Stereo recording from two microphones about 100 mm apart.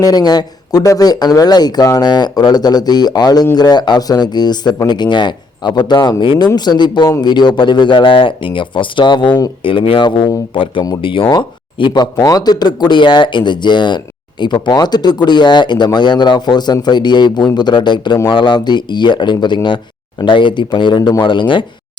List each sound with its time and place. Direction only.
0.0 s speech: 40° left (ahead or behind)
9.6 s speech: 60° left (ahead or behind)
11.3 s speech: 50° left (ahead or behind)
12.1 s speech: 35° left (ahead or behind); by 21.6 s 55° left (ahead or behind)